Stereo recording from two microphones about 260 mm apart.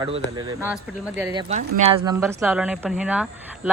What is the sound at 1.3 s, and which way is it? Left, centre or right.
Speech, right.